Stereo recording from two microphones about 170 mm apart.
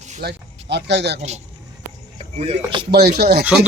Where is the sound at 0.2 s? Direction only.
80° right.